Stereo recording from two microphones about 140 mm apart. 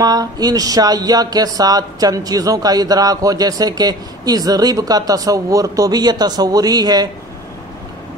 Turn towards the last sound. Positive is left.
turn(degrees=-30)  # may be behind; listen again after turning